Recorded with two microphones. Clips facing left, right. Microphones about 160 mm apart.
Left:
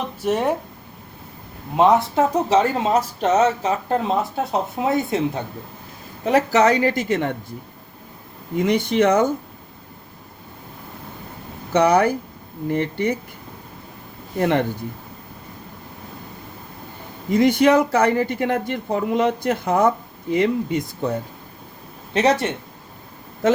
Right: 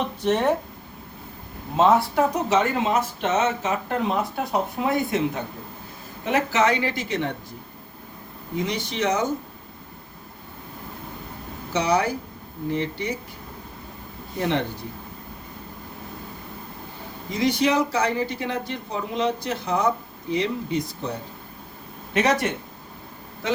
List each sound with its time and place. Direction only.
0.2 s speech: 10° left (ahead or behind)
1.7 s speech: 15° left (ahead or behind)
2.5 s speech: 35° left (ahead or behind)
6.2 s speech: 40° left (ahead or behind)
8.5 s speech: 55° left (ahead or behind)
11.7 s speech: 55° left (ahead or behind)
14.3 s speech: 50° left (ahead or behind)
17.3 s speech: 55° left (ahead or behind)
22.1 s speech: 30° left (ahead or behind)